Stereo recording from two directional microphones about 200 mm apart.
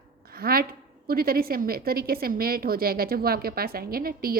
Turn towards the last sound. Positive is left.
turn(degrees=-45)  # may be behind; listen again after turning